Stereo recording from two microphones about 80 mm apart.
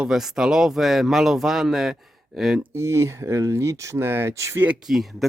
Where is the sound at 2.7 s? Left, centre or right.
Right.